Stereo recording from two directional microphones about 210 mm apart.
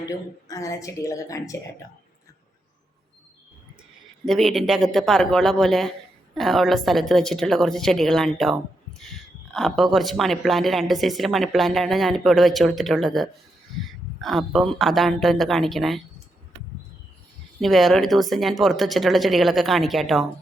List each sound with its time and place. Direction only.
0.0 s a woman's voice: 15° left (ahead or behind)
4.3 s a woman's voice: centre (ahead or behind)
17.6 s a woman's voice: centre (ahead or behind)